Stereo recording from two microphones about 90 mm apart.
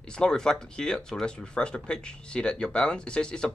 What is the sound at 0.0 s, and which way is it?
Speech, 10° left (ahead or behind).